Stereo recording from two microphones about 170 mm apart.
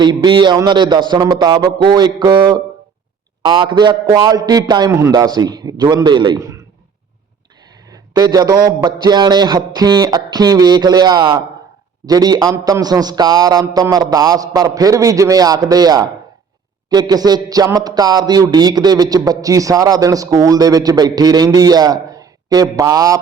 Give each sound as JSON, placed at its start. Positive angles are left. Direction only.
{"t": 0.0, "sound": "speech", "side_deg": -25}
{"t": 7.9, "sound": "speech", "side_deg": -20}